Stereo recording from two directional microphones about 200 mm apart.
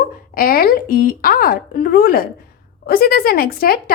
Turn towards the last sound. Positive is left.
turn(degrees=50)  # may be behind; listen again after turning